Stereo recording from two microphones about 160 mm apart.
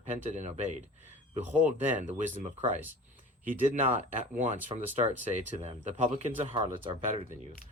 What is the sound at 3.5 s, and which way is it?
Speech, 55° right (ahead or behind).